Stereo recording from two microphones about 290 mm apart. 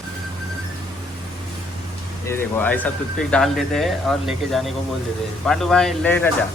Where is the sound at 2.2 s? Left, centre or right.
Centre.